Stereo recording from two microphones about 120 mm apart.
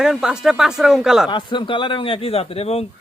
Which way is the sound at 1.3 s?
40° left (ahead or behind).